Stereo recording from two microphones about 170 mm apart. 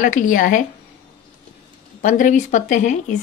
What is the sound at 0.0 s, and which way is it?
Speech, 50° left (ahead or behind).